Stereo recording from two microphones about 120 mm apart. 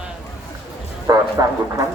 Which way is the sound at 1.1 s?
35° right (ahead or behind).